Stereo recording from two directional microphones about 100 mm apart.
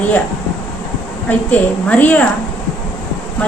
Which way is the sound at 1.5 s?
15° left (ahead or behind).